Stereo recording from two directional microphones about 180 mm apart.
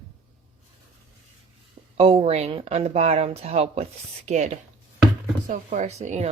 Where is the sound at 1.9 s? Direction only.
35° right (ahead or behind).